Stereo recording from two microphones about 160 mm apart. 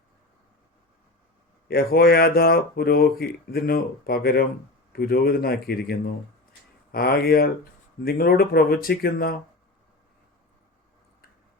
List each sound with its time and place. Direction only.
1.6 s speech: 70° left (ahead or behind)